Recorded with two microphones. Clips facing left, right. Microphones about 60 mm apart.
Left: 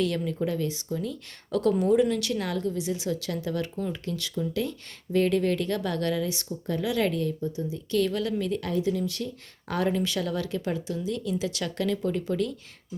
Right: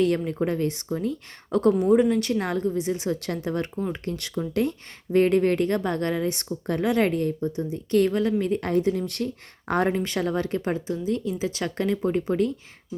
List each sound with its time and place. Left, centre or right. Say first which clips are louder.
0.0 s speech: right 4 dB; right